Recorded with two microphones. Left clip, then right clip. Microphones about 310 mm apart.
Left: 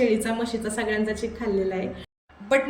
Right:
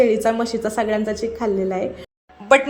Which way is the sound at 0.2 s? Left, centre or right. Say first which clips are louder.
Right 8 dB; centre.